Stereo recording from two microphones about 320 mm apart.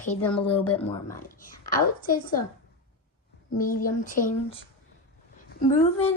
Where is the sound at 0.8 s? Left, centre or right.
Centre.